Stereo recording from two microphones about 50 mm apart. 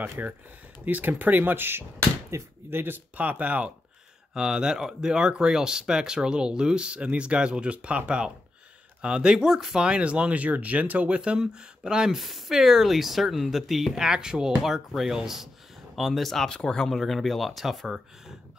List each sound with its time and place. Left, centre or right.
0.2 s speech: right
0.8 s speech: right
2.3 s speech: right
2.7 s speech: right
3.2 s speech: right
4.3 s speech: centre
9.8 s speech: right
11.1 s speech: centre
12.2 s speech: centre